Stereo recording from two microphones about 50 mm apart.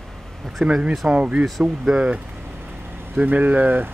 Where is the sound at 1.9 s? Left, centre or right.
Right.